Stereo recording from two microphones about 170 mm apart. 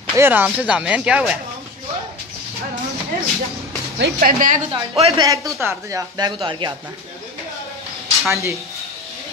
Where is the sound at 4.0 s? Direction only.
55° right (ahead or behind).